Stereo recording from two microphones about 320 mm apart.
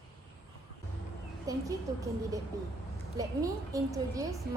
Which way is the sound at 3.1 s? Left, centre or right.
Centre.